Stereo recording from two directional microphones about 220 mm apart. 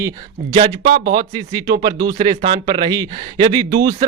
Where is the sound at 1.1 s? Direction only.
15° right (ahead or behind).